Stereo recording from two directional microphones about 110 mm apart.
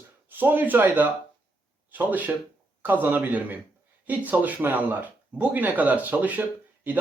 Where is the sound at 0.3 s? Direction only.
15° right (ahead or behind).